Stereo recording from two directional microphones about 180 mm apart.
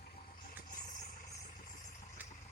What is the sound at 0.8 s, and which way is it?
Vehicle, 50° left (ahead or behind).